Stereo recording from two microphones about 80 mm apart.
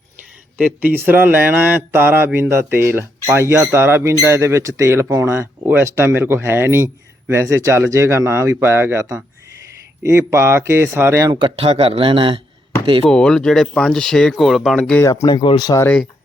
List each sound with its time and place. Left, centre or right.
0.6 s speech: right
11.3 s a man's voice: right
13.1 s speech: centre
15.0 s speech: left
15.4 s speech: left